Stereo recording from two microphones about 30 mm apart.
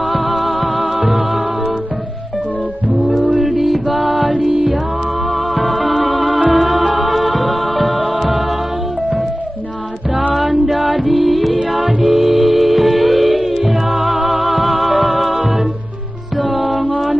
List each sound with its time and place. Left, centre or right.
0.1 s music: centre
3.0 s music: centre
6.2 s music: right
6.5 s music: centre
10.3 s music: centre
16.3 s music: centre